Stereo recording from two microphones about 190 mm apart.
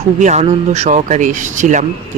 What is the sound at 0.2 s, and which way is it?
Speech, 35° right (ahead or behind).